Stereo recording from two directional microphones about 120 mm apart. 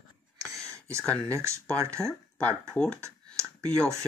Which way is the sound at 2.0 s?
10° left (ahead or behind).